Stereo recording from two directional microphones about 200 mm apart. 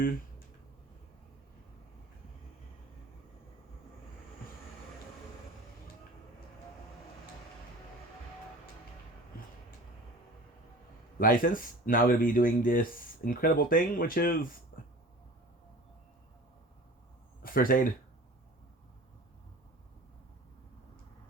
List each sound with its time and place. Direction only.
11.2 s speech: 45° left (ahead or behind)
17.4 s speech: 45° left (ahead or behind)